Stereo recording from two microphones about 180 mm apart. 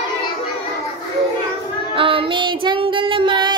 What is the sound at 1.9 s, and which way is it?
Child singing, 30° right (ahead or behind).